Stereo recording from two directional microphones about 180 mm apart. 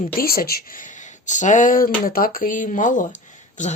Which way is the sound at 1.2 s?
45° left (ahead or behind).